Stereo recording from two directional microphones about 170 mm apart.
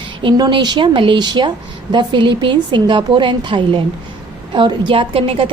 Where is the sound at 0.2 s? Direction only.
25° right (ahead or behind).